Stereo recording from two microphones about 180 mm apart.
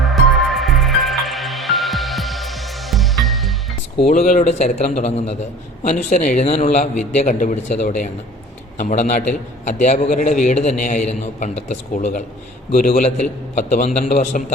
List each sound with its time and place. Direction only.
0.0 s music: centre (ahead or behind)
4.1 s a man's voice: 45° left (ahead or behind)
12.7 s a man's voice: 55° left (ahead or behind)